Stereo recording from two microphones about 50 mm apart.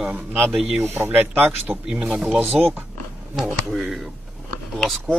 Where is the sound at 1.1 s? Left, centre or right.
Right.